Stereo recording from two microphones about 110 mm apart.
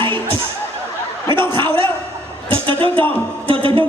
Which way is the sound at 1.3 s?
50° right (ahead or behind).